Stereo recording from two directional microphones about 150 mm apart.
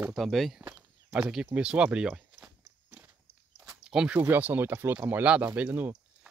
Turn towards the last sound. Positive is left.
turn(degrees=-10)  # may be behind; listen again after turning